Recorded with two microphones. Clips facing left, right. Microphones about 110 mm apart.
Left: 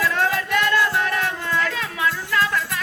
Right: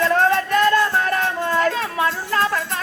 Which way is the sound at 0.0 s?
40° right (ahead or behind).